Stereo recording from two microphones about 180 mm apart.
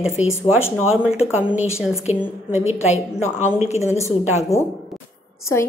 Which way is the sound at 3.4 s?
40° left (ahead or behind).